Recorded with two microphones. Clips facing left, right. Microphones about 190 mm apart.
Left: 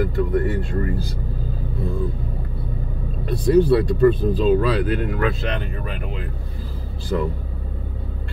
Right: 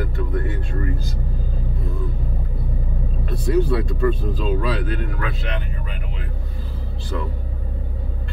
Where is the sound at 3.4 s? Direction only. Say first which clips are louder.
Left 5 dB; 35° left (ahead or behind).